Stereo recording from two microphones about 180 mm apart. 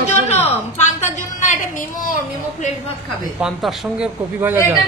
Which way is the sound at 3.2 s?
Centre (ahead or behind).